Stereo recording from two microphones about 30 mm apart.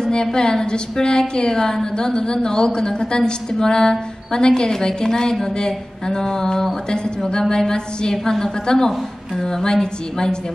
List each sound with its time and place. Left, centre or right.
0.0 s a woman's voice: left